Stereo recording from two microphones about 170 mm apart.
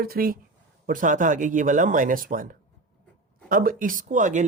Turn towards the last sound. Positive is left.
turn(degrees=-50)  # may be behind; listen again after turning